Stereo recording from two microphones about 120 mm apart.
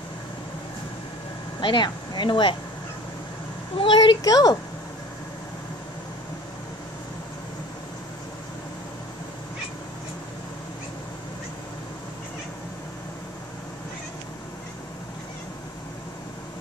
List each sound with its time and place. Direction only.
1.6 s speech: 40° left (ahead or behind)
3.7 s speech: 40° left (ahead or behind)